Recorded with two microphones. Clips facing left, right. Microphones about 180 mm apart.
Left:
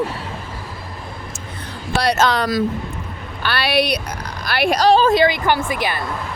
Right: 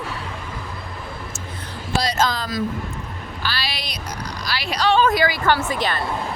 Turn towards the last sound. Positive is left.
turn(degrees=10)  # may be behind; listen again after turning